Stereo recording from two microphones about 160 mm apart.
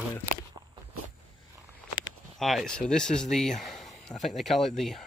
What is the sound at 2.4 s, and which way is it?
Speech, centre (ahead or behind).